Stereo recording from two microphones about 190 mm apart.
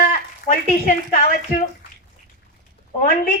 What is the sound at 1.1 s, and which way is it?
Speech, 45° left (ahead or behind).